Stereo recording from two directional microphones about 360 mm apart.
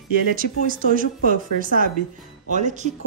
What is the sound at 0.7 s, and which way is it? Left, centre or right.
A woman's voice, right.